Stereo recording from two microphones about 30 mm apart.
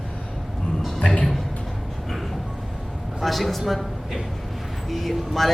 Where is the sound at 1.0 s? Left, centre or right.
Left.